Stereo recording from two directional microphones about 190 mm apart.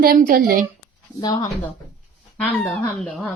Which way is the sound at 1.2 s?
20° left (ahead or behind).